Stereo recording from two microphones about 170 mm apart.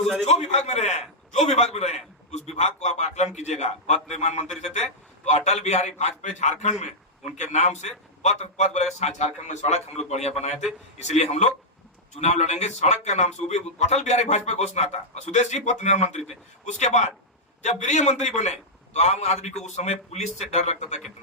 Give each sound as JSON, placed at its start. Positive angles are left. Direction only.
{"t": 0.0, "sound": "a man's voice", "side_deg": 5}
{"t": 0.3, "sound": "a man's voice", "side_deg": 40}